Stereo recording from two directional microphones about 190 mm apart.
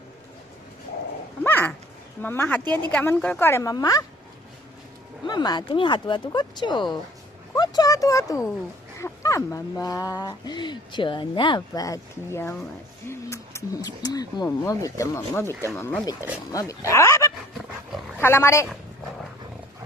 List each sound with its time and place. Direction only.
1.5 s dog: 10° left (ahead or behind)
2.2 s speech: 10° left (ahead or behind)
5.2 s speech: 20° left (ahead or behind)